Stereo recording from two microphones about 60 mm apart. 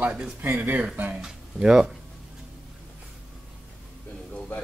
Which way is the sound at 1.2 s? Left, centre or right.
Centre.